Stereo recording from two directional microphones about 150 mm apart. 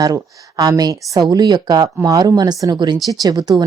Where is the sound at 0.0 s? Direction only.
25° right (ahead or behind).